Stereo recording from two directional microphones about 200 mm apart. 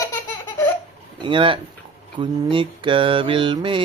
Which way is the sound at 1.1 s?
25° right (ahead or behind).